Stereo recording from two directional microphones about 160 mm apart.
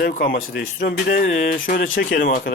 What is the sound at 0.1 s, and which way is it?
Speech, 65° left (ahead or behind).